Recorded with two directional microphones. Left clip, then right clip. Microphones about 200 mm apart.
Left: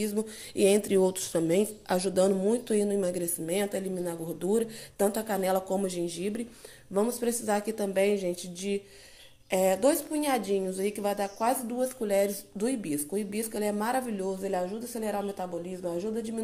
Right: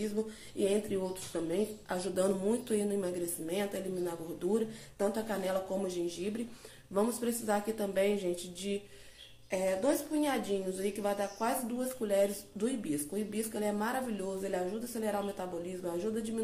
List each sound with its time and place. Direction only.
0.0 s a woman's voice: 45° left (ahead or behind)
9.5 s a woman's voice: 45° left (ahead or behind); by 16.3 s 30° left (ahead or behind)